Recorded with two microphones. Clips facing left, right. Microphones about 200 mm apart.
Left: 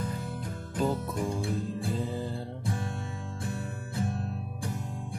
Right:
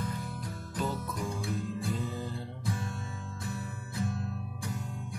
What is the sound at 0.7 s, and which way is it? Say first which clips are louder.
Music: left 5 dB; 30° left (ahead or behind).